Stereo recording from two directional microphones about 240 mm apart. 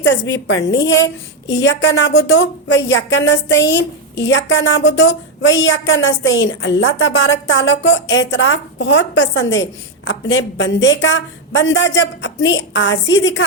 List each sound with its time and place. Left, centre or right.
0.0 s a woman's voice: left